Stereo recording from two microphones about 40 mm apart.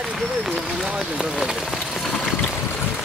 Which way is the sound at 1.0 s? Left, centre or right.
Centre.